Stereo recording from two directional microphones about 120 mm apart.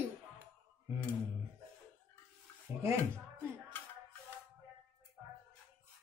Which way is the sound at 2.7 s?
15° right (ahead or behind).